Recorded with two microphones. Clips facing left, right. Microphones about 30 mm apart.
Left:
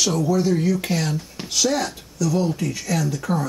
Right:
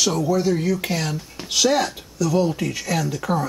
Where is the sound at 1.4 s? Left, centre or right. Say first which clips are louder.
Right 3 dB; centre.